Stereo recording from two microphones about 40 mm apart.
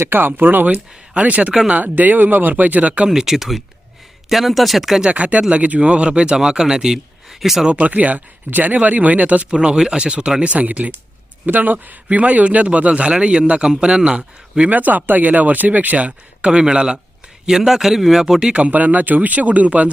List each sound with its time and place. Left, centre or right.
0.0 s speech: right
0.7 s speech: right
1.7 s speech: right
3.1 s speech: centre
5.1 s speech: right; by 7.6 s centre
7.8 s speech: right
9.5 s speech: centre; by 11.9 s right
12.0 s speech: right
14.7 s speech: right
16.5 s speech: right
18.5 s speech: right